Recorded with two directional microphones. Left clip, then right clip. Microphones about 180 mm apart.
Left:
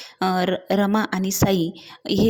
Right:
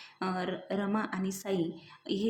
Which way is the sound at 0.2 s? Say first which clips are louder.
Left 13 dB; 45° left (ahead or behind).